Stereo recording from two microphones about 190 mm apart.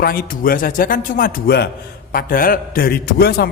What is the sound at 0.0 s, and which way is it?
A man's voice, 50° left (ahead or behind).